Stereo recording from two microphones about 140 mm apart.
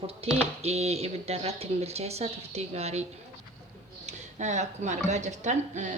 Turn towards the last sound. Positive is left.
turn(degrees=-60)  # may be behind; listen again after turning